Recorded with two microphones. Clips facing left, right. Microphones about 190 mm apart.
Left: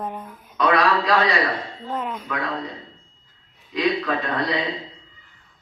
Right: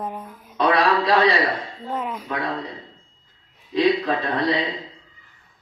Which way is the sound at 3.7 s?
25° right (ahead or behind).